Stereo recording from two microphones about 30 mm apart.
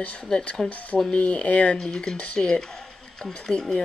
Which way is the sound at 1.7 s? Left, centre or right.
Left.